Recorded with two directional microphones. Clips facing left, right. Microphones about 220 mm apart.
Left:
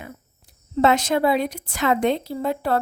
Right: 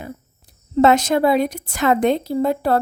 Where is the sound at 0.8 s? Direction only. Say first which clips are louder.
Right 4 dB; 45° right (ahead or behind).